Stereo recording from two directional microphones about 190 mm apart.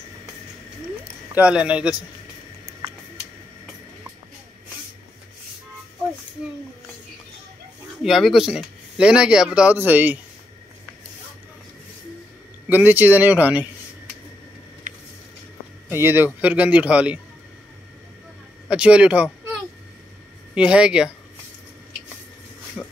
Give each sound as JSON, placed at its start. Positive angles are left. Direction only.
{"t": 1.3, "sound": "speech", "side_deg": -5}
{"t": 8.0, "sound": "speech", "side_deg": 0}
{"t": 12.6, "sound": "speech", "side_deg": -10}
{"t": 15.9, "sound": "speech", "side_deg": -10}
{"t": 18.7, "sound": "speech", "side_deg": -5}
{"t": 20.5, "sound": "speech", "side_deg": -5}
{"t": 22.8, "sound": "speech", "side_deg": 0}